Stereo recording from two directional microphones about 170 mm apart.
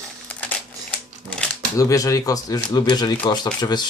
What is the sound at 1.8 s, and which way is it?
Speech, 20° left (ahead or behind).